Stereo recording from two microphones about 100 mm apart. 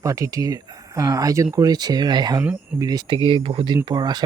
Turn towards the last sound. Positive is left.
turn(degrees=-45)  # may be behind; listen again after turning